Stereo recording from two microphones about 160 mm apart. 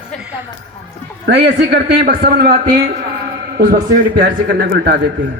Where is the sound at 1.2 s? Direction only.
90° right; by 2.5 s 75° right (ahead or behind).